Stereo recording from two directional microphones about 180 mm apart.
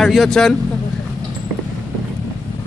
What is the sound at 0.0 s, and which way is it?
Speech, centre (ahead or behind).